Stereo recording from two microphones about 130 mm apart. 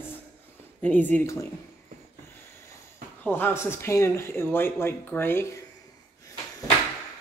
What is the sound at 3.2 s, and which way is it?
Speech, 15° left (ahead or behind).